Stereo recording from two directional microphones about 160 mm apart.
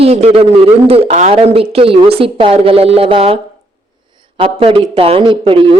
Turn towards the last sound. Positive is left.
turn(degrees=-30)  # may be behind; listen again after turning